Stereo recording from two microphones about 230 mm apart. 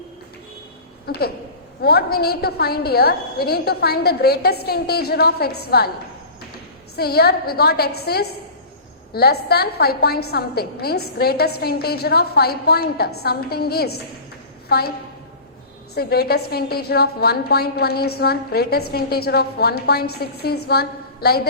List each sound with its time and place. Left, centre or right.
1.1 s a woman's voice: left
6.9 s a woman's voice: left
16.0 s a woman's voice: left